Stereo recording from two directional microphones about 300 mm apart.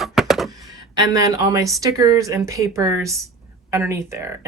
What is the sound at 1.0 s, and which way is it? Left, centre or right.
Speech, centre.